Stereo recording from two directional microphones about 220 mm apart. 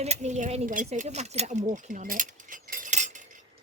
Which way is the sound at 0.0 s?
30° right (ahead or behind).